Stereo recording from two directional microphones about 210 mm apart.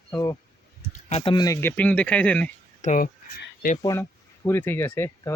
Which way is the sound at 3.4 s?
45° left (ahead or behind).